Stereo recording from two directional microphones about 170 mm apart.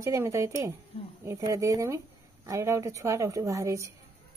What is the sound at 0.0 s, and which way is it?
Speech, 15° right (ahead or behind).